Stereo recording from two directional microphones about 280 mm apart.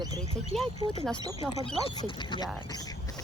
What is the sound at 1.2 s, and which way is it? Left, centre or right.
Speech, centre.